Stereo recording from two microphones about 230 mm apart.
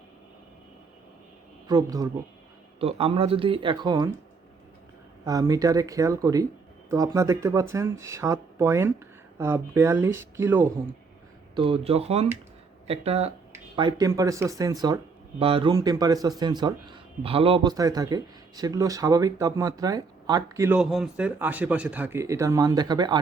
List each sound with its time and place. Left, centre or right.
1.6 s speech: centre
5.2 s speech: centre
11.5 s speech: right